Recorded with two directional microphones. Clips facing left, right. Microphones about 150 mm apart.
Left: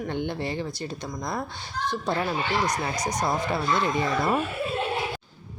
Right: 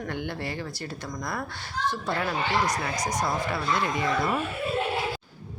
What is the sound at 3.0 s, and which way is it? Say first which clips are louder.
Speech: left 1 dB; 25° left (ahead or behind).